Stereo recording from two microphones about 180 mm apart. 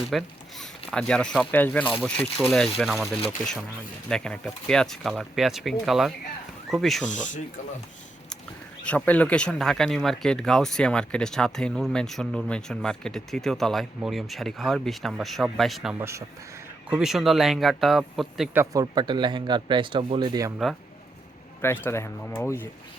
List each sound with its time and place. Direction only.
0.1 s speech: centre (ahead or behind)
8.8 s speech: 5° left (ahead or behind)
16.0 s speech: 15° right (ahead or behind)
16.9 s speech: centre (ahead or behind)
18.5 s speech: 15° right (ahead or behind)
21.6 s speech: 15° left (ahead or behind)